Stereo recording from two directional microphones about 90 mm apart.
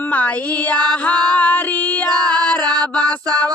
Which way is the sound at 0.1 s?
15° left (ahead or behind).